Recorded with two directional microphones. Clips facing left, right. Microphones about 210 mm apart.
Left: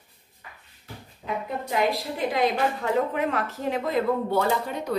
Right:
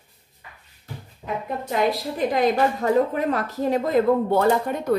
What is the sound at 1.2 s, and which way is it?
A woman's voice, 45° right (ahead or behind).